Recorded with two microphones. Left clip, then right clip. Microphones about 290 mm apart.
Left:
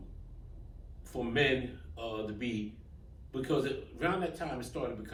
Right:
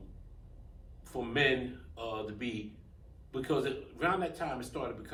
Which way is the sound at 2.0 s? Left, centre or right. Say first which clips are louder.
Even; centre.